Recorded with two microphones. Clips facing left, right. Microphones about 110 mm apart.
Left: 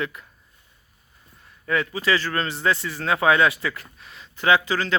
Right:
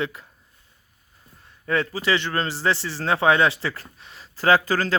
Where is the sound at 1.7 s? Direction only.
30° right (ahead or behind).